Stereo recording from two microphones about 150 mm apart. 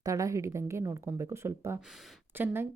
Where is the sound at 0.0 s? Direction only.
20° right (ahead or behind).